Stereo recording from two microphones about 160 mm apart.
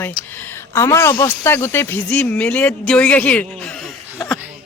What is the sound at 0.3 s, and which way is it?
Speech, 15° left (ahead or behind).